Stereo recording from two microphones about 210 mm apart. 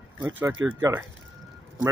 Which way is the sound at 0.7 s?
10° right (ahead or behind).